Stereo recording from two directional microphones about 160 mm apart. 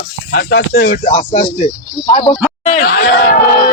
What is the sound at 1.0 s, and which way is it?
Speech, 45° left (ahead or behind).